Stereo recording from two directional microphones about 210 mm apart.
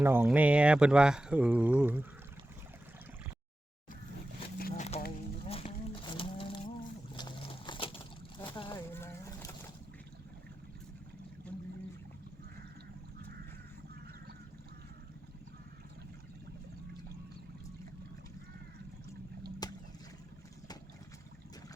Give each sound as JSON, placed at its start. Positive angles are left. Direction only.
{"t": 0.0, "sound": "speech", "side_deg": -10}
{"t": 4.7, "sound": "a sound", "side_deg": 30}
{"t": 5.5, "sound": "boat", "side_deg": 25}
{"t": 7.1, "sound": "a sound", "side_deg": 20}
{"t": 8.4, "sound": "splash", "side_deg": 20}
{"t": 8.9, "sound": "boat", "side_deg": 10}
{"t": 19.6, "sound": "boat", "side_deg": 20}